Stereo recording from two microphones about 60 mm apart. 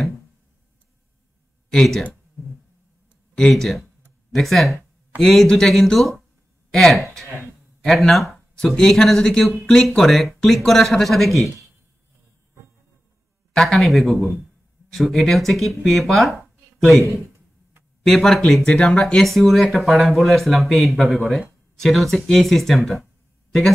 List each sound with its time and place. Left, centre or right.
1.7 s speech: centre
4.3 s speech: centre
13.6 s speech: centre
18.0 s speech: centre
18.6 s speech: centre
19.2 s speech: centre